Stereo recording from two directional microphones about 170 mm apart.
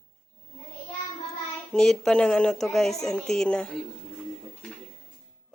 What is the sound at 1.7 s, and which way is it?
Speech, 5° left (ahead or behind).